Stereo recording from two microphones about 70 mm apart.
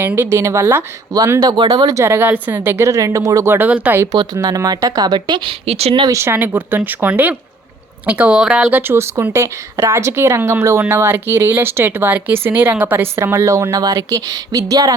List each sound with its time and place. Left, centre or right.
0.2 s speech: right
1.4 s speech: right
2.0 s speech: right
3.5 s speech: right
4.4 s speech: right
6.1 s speech: right; by 8.6 s centre
8.7 s speech: right